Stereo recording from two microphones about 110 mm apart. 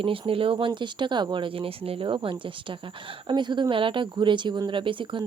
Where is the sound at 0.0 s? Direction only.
55° right (ahead or behind).